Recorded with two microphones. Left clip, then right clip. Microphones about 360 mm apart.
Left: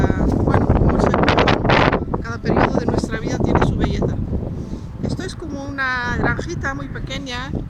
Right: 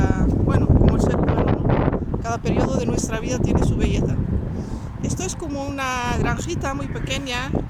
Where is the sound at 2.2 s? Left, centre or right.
Centre.